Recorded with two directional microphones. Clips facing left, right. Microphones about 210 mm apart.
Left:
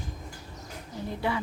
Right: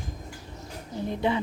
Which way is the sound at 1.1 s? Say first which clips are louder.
Right 4 dB; 20° right (ahead or behind).